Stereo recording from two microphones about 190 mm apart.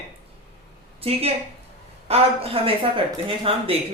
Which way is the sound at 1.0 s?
30° right (ahead or behind).